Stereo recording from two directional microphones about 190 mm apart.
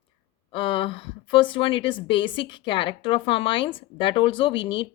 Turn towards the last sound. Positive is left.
turn(degrees=25)  # may be behind; listen again after turning